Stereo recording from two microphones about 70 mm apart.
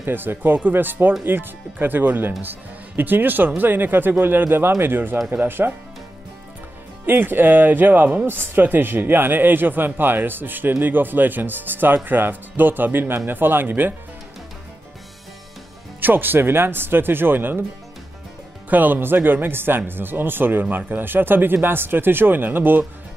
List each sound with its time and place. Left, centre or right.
0.0 s speech: right
7.1 s speech: right
16.0 s speech: right
18.7 s speech: right